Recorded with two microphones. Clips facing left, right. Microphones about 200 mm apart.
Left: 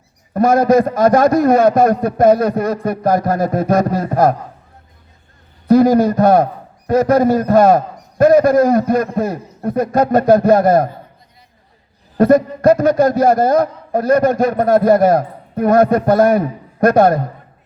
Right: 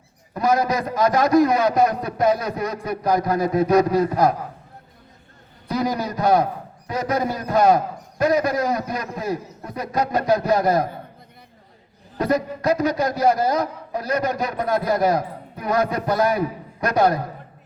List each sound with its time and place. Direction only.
0.3 s a man's voice: 50° left (ahead or behind)
5.6 s a man's voice: 50° left (ahead or behind)
12.1 s a man's voice: 50° left (ahead or behind)